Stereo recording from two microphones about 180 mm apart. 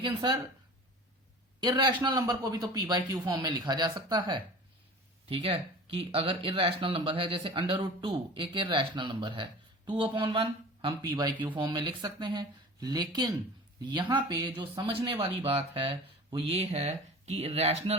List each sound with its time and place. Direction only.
0.0 s speech: 25° right (ahead or behind)
1.6 s speech: 25° right (ahead or behind)